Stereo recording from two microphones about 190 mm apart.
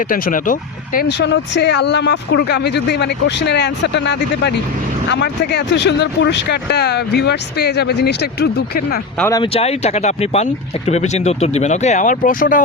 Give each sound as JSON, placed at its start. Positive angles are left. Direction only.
{"t": 0.1, "sound": "speech", "side_deg": 45}
{"t": 1.0, "sound": "speech", "side_deg": 65}
{"t": 9.3, "sound": "speech", "side_deg": 30}